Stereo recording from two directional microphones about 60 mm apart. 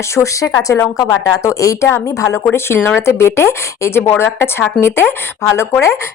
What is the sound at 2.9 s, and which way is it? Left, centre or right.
Speech, left.